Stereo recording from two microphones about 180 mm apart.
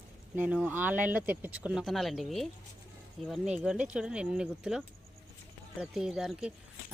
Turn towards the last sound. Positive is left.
turn(degrees=0)  # may be behind; listen again after turning